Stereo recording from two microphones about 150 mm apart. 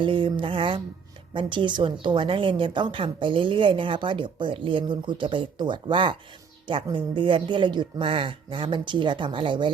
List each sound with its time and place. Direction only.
0.0 s a woman's voice: 35° right (ahead or behind)